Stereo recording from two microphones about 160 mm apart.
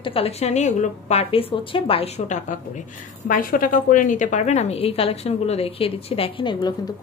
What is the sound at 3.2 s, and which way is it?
A woman's voice, 60° left (ahead or behind).